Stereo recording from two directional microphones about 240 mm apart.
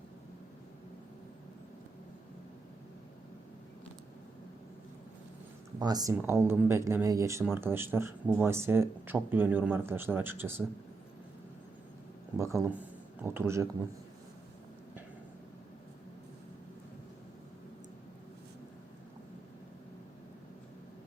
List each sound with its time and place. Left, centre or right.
5.8 s speech: centre
12.4 s speech: centre